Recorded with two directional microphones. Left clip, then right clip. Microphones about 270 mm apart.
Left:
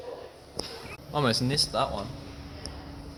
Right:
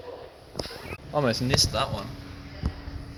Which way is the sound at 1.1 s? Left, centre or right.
Centre.